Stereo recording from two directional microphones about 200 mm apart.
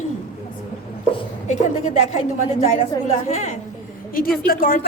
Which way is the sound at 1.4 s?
35° left (ahead or behind).